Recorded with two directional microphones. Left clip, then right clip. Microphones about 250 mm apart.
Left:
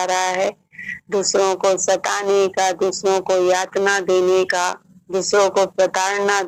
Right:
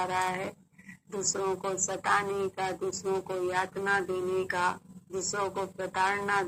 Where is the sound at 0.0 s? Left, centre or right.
Left.